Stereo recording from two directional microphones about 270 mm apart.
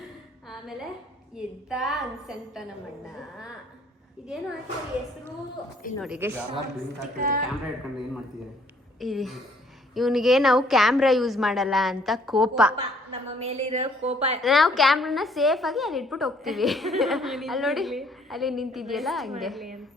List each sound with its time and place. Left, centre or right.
0.4 s a sound: centre
1.4 s a woman's voice: centre
6.0 s speech: centre
7.2 s speech: right
9.0 s a woman's voice: centre
13.1 s a woman's voice: right
14.4 s a woman's voice: centre